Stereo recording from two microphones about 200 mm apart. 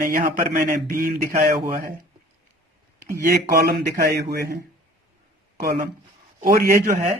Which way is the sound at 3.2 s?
50° right (ahead or behind).